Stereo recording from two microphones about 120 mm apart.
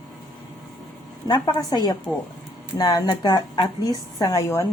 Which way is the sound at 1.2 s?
35° left (ahead or behind).